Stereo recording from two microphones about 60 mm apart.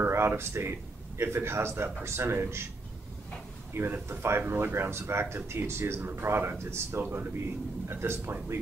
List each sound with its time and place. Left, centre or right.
0.0 s a man's voice: right
3.9 s speech: right